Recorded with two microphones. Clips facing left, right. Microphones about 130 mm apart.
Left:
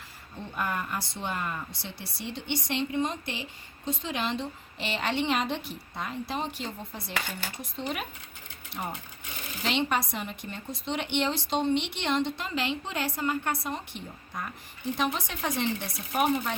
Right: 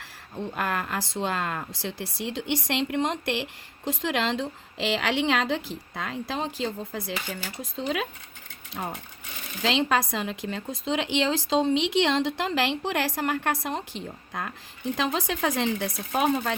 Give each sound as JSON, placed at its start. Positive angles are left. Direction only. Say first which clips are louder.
{"t": 0.3, "sound": "speech", "louder": "right 3 dB", "side_deg": -90}
{"t": 9.6, "sound": "speech", "louder": "right 4 dB", "side_deg": -90}